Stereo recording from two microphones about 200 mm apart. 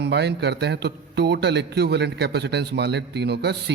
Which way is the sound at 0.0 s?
55° right (ahead or behind).